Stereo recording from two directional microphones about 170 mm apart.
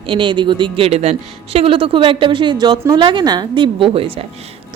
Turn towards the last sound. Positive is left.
turn(degrees=-35)  # may be behind; listen again after turning